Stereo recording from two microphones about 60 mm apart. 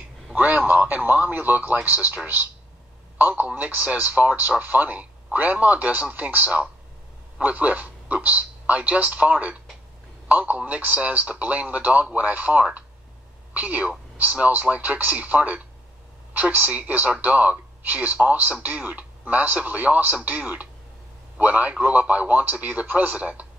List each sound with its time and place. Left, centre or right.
0.4 s a woman's voice: right